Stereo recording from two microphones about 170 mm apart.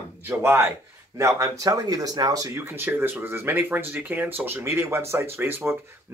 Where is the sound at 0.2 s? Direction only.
15° right (ahead or behind).